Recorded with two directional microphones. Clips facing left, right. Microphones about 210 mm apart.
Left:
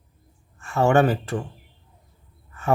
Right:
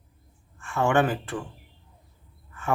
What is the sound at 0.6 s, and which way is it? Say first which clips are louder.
Speech: left 4 dB; 40° left (ahead or behind).